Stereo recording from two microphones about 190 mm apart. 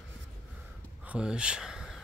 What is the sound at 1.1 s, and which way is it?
Speech, 5° right (ahead or behind).